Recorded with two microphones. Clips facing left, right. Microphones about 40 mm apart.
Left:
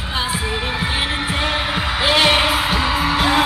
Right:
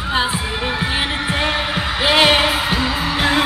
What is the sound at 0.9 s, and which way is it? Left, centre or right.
Music, centre.